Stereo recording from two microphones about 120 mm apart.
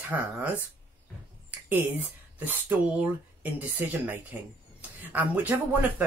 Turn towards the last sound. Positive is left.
turn(degrees=-15)  # may be behind; listen again after turning